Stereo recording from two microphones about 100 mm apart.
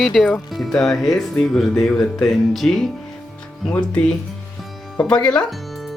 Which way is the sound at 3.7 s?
10° left (ahead or behind).